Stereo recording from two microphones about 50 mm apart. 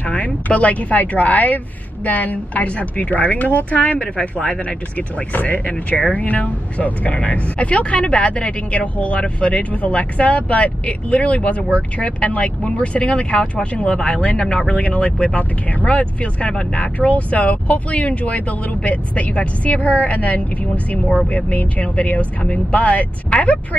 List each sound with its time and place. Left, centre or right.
0.0 s a woman's voice: left